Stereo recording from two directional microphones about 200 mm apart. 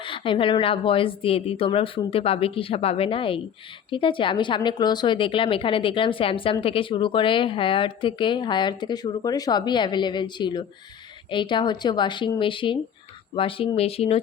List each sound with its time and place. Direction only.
0.0 s a woman's voice: 25° left (ahead or behind)